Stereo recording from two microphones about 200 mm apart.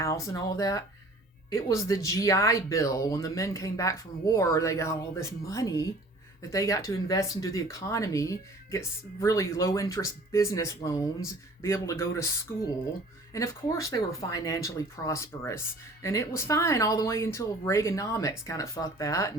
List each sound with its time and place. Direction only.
0.0 s speech: 15° left (ahead or behind)
13.3 s speech: 15° left (ahead or behind)